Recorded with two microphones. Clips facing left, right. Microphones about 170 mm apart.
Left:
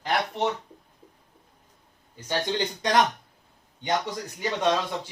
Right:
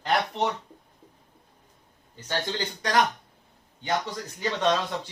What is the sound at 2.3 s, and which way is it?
Speech, 20° left (ahead or behind).